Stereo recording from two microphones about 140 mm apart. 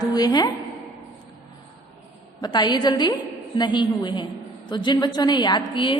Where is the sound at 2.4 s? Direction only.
30° left (ahead or behind).